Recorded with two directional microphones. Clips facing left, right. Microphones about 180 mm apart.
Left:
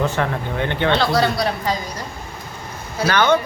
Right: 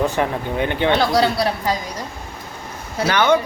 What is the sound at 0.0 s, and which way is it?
A man's voice, 15° right (ahead or behind).